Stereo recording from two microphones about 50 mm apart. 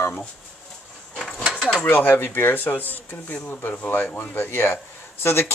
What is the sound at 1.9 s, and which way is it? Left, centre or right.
A man's voice, left.